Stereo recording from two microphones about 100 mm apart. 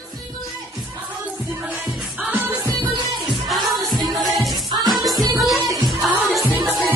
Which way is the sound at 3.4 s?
Centre (ahead or behind).